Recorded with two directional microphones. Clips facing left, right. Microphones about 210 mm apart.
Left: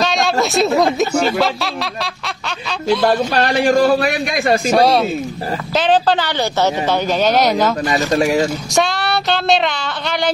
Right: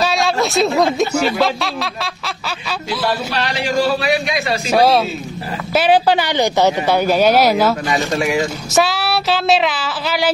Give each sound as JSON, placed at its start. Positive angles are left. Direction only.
{"t": 0.0, "sound": "speech", "side_deg": 0}
{"t": 3.3, "sound": "a man's voice", "side_deg": 50}
{"t": 4.6, "sound": "a sound", "side_deg": 0}
{"t": 5.8, "sound": "speech", "side_deg": -10}
{"t": 7.9, "sound": "speech", "side_deg": 35}
{"t": 8.7, "sound": "a sound", "side_deg": -5}